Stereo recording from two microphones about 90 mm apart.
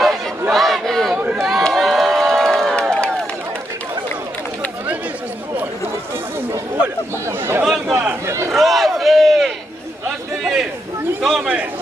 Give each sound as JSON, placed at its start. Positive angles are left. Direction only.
{"t": 0.5, "sound": "chatter", "side_deg": 0}
{"t": 1.1, "sound": "run", "side_deg": -15}
{"t": 1.4, "sound": "crowd", "side_deg": 0}
{"t": 7.3, "sound": "chatter", "side_deg": -30}
{"t": 7.6, "sound": "a sound", "side_deg": -5}
{"t": 8.4, "sound": "crowd", "side_deg": 0}
{"t": 10.4, "sound": "a sound", "side_deg": 0}